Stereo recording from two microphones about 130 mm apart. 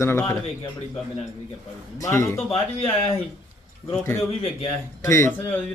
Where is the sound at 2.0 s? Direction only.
20° left (ahead or behind).